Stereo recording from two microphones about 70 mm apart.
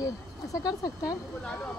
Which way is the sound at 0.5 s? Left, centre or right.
Left.